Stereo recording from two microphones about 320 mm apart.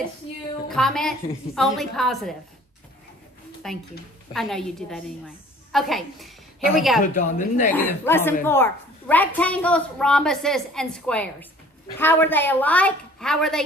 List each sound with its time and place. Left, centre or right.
0.7 s a woman's voice: centre
3.6 s a woman's voice: centre
7.0 s a woman's voice: left
7.7 s a woman's voice: centre